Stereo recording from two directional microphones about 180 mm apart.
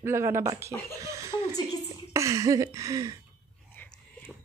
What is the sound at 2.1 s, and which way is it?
Speech, 15° right (ahead or behind).